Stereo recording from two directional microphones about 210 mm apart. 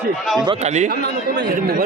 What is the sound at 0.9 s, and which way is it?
Speech, 50° right (ahead or behind).